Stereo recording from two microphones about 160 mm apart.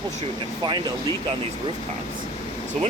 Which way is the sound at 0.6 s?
25° right (ahead or behind).